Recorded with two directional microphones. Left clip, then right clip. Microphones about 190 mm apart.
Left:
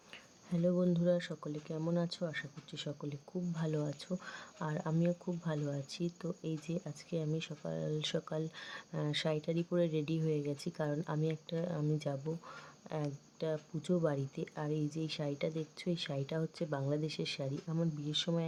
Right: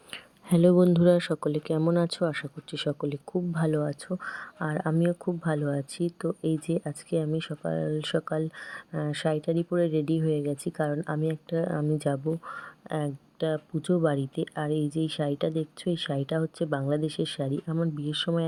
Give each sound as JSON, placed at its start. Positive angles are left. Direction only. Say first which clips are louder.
{"t": 0.1, "sound": "speech", "louder": "right 14 dB", "side_deg": -40}